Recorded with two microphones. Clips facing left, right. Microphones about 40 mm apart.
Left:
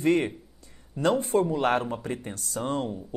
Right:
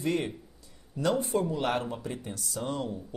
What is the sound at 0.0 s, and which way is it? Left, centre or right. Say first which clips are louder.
Speech: left 6 dB; left.